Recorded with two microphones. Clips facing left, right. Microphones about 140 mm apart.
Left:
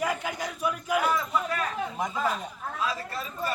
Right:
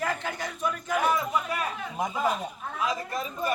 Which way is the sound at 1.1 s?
15° right (ahead or behind).